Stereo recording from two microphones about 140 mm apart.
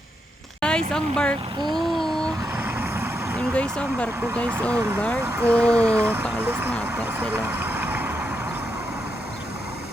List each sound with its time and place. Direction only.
0.6 s vehicle: 5° left (ahead or behind)
2.6 s vehicle: 15° right (ahead or behind)
3.5 s speech: 10° left (ahead or behind)
4.7 s speech: 20° right (ahead or behind)
4.9 s speech: 5° left (ahead or behind)
5.2 s speech: 15° right (ahead or behind)
5.5 s speech: 5° left (ahead or behind)
5.9 s speech: 15° right (ahead or behind)
6.8 s vehicle: 15° right (ahead or behind)